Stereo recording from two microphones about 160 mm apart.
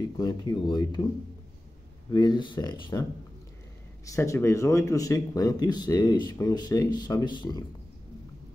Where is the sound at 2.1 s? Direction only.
30° left (ahead or behind).